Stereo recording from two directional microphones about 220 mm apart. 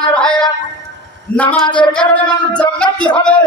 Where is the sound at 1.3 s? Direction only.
5° left (ahead or behind).